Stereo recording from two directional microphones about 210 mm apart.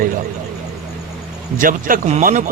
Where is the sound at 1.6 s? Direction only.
40° right (ahead or behind).